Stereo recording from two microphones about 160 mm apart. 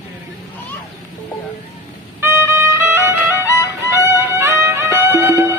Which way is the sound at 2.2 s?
15° right (ahead or behind).